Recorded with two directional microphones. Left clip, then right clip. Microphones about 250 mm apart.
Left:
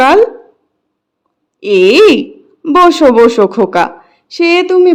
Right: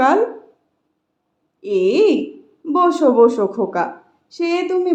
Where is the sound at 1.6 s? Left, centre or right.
Left.